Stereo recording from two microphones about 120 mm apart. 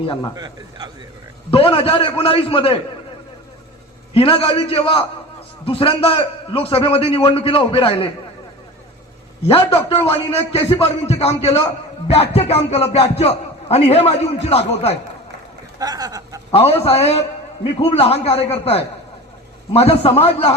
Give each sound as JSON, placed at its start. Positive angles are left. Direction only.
{"t": 0.3, "sound": "a man's voice", "side_deg": -35}
{"t": 1.5, "sound": "a man's voice", "side_deg": 50}
{"t": 4.1, "sound": "a man's voice", "side_deg": 50}
{"t": 9.5, "sound": "speech", "side_deg": 50}
{"t": 15.8, "sound": "a sound", "side_deg": -30}
{"t": 16.5, "sound": "speech", "side_deg": 55}